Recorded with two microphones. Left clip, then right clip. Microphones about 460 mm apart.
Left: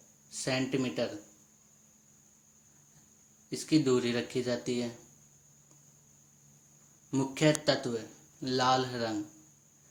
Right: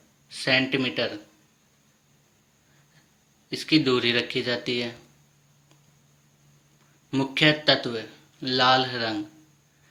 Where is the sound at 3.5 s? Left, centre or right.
Left.